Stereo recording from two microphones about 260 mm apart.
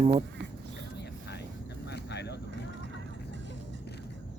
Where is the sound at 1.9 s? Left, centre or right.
Left.